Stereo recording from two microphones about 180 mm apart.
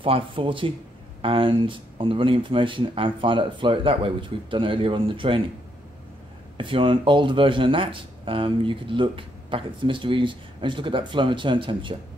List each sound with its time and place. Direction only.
0.0 s speech: 30° right (ahead or behind)
6.5 s speech: 30° right (ahead or behind)